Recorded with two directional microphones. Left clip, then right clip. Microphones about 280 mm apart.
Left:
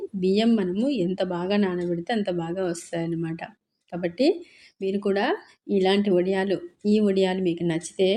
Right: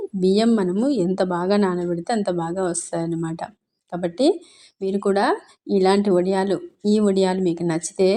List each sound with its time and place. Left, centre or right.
0.2 s speech: centre